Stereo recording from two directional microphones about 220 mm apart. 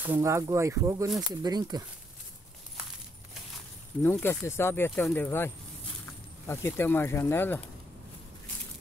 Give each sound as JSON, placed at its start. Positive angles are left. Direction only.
{"t": 0.0, "sound": "speech", "side_deg": -10}
{"t": 4.0, "sound": "speech", "side_deg": 10}